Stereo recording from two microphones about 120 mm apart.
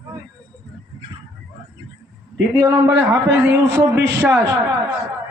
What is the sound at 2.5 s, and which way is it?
A man's voice, 30° right (ahead or behind).